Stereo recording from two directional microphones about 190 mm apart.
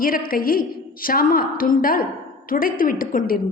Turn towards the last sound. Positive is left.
turn(degrees=50)  # may be behind; listen again after turning